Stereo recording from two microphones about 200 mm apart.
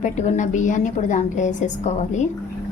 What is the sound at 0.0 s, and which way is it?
A woman's voice, 40° left (ahead or behind).